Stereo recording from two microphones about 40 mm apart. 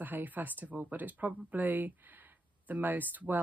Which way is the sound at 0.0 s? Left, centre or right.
Right.